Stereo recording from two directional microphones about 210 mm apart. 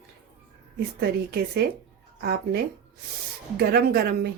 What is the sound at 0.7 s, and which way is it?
A woman's voice, 50° right (ahead or behind).